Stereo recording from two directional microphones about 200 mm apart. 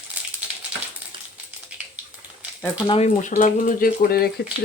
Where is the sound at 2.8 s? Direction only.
25° left (ahead or behind); by 4.3 s 50° left (ahead or behind).